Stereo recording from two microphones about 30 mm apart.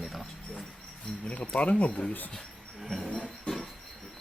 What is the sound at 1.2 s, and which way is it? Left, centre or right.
Speech, left.